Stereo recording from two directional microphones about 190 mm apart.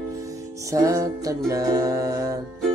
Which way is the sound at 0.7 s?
15° right (ahead or behind).